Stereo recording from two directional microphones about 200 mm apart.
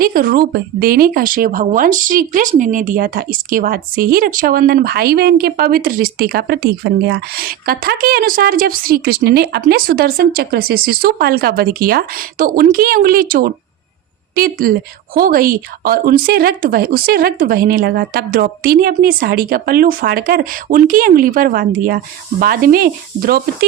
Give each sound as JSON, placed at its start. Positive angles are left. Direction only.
{"t": 0.0, "sound": "speech", "side_deg": -45}